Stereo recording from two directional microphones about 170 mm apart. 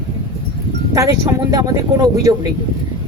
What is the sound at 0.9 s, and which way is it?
Speech, 20° right (ahead or behind).